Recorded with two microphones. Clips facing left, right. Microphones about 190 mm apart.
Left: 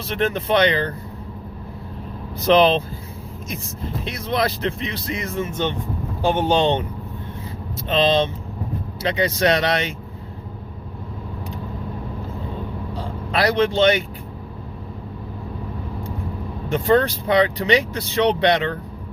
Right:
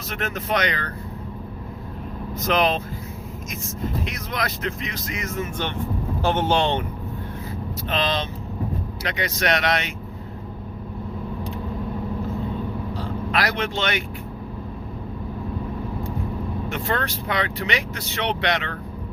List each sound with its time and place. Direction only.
0.1 s speech: 30° left (ahead or behind)
2.4 s speech: 30° left (ahead or behind)
4.0 s speech: 30° left (ahead or behind)
6.2 s speech: 15° left (ahead or behind)
7.9 s speech: 25° left (ahead or behind)
13.0 s speech: 30° left (ahead or behind)
16.6 s speech: 35° left (ahead or behind)